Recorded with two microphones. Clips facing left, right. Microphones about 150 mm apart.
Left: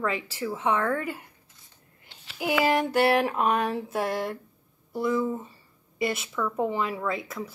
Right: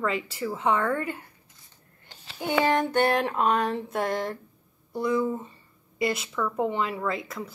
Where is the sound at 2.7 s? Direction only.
10° left (ahead or behind).